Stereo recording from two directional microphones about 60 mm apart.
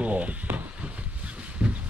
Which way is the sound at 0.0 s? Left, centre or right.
Right.